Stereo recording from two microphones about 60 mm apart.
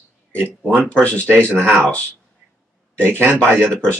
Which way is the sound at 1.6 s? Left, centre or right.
Right.